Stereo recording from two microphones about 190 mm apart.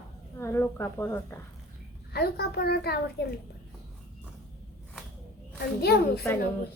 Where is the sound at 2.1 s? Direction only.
55° left (ahead or behind).